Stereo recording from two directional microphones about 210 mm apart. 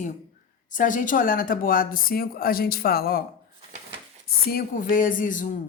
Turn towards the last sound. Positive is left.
turn(degrees=40)  # may be behind; listen again after turning